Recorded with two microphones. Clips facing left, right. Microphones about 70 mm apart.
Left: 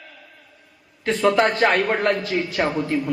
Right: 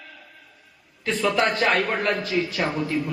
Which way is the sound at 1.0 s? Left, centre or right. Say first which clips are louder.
Left 4 dB; left.